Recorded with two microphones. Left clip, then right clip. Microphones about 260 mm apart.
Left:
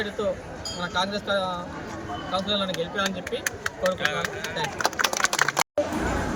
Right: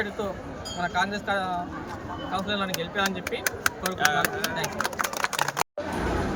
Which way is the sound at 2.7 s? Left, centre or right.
Right.